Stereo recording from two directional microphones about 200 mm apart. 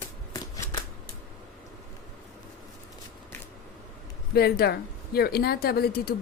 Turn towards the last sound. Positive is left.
turn(degrees=50)  # may be behind; listen again after turning